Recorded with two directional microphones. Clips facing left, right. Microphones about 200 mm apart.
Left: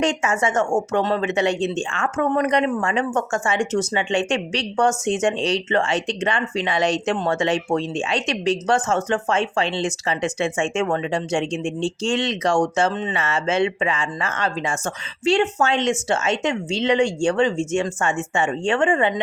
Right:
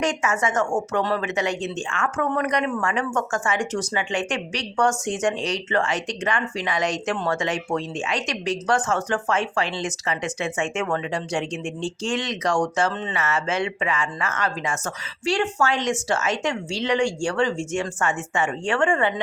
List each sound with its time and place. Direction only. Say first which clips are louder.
0.0 s speech: left 3 dB; 25° left (ahead or behind)